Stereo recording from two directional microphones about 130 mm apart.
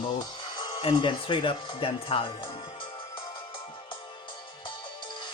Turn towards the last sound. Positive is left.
turn(degrees=35)  # may be behind; listen again after turning